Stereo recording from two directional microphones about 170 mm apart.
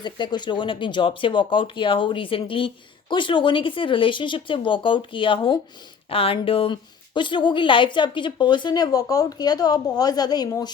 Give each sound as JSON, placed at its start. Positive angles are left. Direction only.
{"t": 0.0, "sound": "speech", "side_deg": 25}